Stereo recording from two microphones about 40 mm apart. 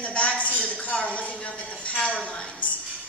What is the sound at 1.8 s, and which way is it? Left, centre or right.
Dishes, left.